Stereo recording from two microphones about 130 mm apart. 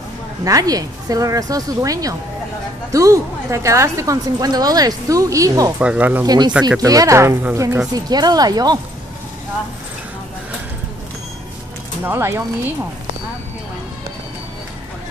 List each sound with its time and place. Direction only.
0.5 s a woman's voice: 30° right (ahead or behind)
5.8 s speech: 10° right (ahead or behind)
6.2 s a woman's voice: 30° right (ahead or behind)
12.0 s speech: 20° right (ahead or behind)